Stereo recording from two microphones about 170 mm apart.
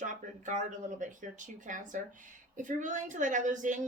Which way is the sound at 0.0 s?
45° right (ahead or behind).